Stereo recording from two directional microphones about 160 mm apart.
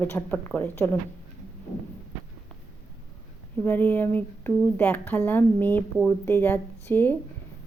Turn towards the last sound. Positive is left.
turn(degrees=10)  # may be behind; listen again after turning